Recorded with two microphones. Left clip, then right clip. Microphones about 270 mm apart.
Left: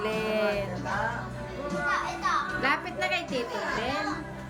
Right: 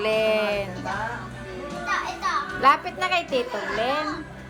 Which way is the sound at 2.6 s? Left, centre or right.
Centre.